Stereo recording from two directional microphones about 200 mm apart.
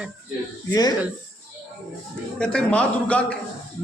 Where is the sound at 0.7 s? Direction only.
20° left (ahead or behind).